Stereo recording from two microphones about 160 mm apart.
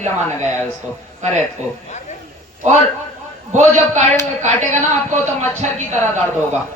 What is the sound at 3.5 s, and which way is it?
A man's voice, 50° right (ahead or behind).